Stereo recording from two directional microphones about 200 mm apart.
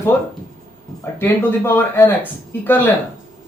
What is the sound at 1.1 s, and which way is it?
A man's voice, 10° left (ahead or behind).